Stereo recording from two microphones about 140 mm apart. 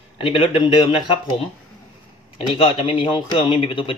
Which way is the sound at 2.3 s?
40° left (ahead or behind).